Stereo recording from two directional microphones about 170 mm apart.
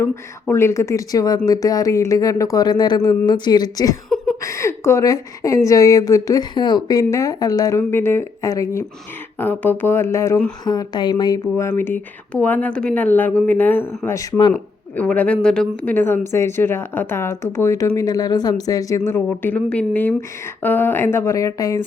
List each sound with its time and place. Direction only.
0.0 s a woman's voice: 15° left (ahead or behind)
14.9 s speech: 10° left (ahead or behind)